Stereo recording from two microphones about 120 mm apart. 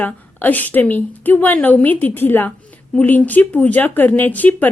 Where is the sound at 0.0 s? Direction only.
15° left (ahead or behind).